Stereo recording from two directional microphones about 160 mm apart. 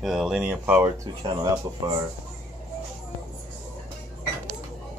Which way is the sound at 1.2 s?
25° right (ahead or behind).